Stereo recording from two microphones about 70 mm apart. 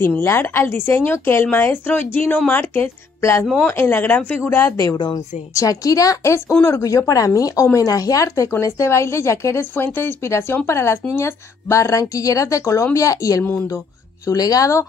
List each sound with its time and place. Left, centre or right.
0.0 s speech: left
3.2 s speech: left
4.4 s speech: left
5.5 s speech: left
6.8 s speech: left
8.5 s speech: left
13.4 s speech: left
14.2 s speech: left